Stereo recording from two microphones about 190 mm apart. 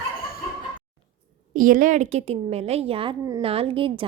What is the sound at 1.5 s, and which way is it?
A woman's voice, 45° right (ahead or behind).